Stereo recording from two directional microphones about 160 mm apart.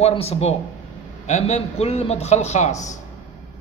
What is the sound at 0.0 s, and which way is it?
A man's voice, 40° left (ahead or behind).